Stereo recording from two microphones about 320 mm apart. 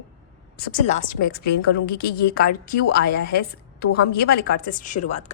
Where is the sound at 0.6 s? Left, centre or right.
Left.